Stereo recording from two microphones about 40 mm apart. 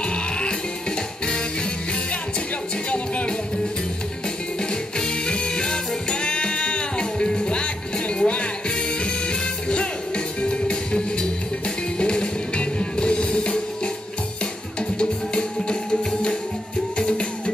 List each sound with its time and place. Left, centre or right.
0.0 s music: left
4.9 s music: left
15.0 s music: left